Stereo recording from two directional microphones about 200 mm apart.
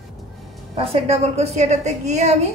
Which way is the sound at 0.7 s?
30° right (ahead or behind).